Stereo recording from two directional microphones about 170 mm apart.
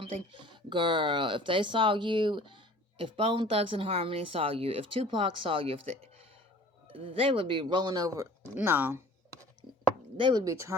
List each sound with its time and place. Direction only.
0.3 s speech: 30° right (ahead or behind); by 9.0 s 10° right (ahead or behind)
10.2 s speech: 25° right (ahead or behind)